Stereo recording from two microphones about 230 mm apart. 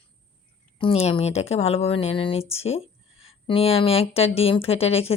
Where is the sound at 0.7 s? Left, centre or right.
Left.